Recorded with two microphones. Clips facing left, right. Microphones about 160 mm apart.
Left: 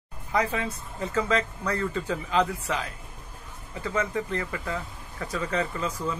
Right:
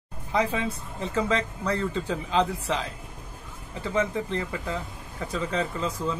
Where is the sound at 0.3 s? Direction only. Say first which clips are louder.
Right 1 dB; 25° right (ahead or behind).